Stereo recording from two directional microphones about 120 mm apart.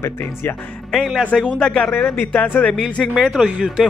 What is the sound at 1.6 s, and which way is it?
Speech, 5° left (ahead or behind).